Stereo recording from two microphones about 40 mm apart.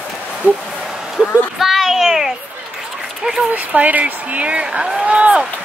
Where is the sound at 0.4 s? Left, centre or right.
Left.